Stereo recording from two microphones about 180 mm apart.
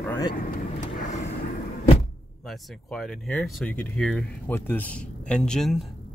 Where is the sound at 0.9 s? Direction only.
45° left (ahead or behind).